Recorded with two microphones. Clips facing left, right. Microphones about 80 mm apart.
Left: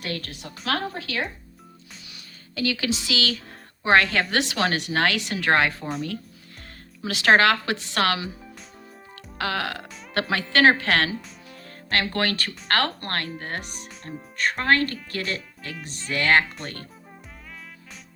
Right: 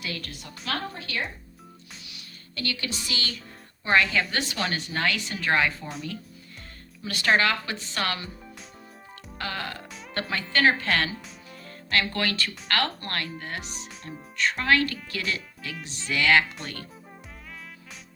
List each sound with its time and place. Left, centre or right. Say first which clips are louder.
0.0 s a woman's voice: left 4 dB; left
0.7 s a woman's voice: left 4 dB; left
2.9 s a woman's voice: left 7 dB; left
3.8 s a woman's voice: left 3 dB; left
7.0 s speech: left 5 dB; left
9.4 s speech: left 6 dB; left
11.1 s music: left 5 dB; centre
11.7 s a woman's voice: left 1 dB; left
16.6 s speech: left 2 dB; centre